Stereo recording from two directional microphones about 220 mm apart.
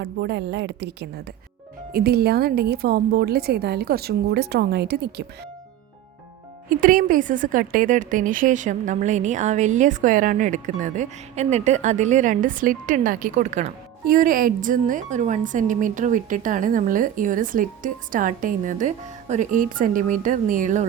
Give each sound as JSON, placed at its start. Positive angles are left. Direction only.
{"t": 0.0, "sound": "a woman's voice", "side_deg": -50}
{"t": 6.7, "sound": "a woman's voice", "side_deg": -40}